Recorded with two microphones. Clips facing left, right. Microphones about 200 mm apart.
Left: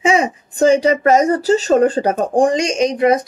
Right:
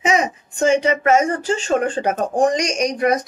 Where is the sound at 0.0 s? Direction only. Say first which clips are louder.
Left 3 dB; 30° left (ahead or behind).